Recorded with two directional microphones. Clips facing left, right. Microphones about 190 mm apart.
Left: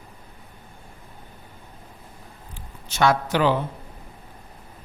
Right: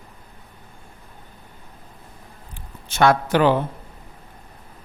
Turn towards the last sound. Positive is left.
turn(degrees=-55)  # may be behind; listen again after turning